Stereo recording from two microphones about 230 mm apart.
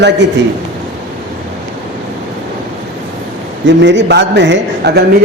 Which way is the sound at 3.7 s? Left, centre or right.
Right.